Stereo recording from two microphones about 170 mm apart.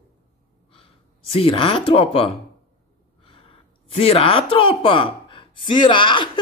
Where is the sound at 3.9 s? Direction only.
35° left (ahead or behind).